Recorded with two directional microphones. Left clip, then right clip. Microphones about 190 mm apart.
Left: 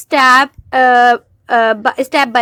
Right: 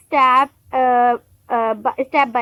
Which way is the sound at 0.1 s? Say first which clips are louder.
Left 5 dB; 30° left (ahead or behind).